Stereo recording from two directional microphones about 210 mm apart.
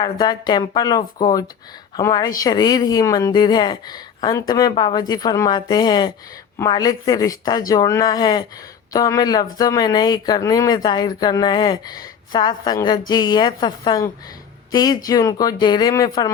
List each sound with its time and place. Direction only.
0.0 s speech: 20° left (ahead or behind)